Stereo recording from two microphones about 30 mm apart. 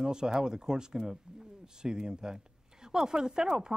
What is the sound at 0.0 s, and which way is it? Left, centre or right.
Speech, right.